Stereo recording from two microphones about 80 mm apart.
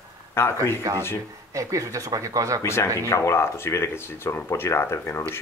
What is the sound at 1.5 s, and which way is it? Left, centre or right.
Speech, right.